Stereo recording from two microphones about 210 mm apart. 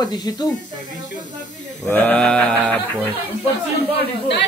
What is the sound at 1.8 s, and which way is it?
Speech, 5° left (ahead or behind).